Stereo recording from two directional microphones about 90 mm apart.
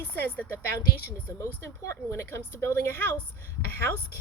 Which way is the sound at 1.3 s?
35° left (ahead or behind).